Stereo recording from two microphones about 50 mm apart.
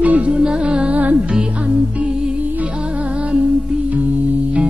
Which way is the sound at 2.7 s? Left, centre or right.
Right.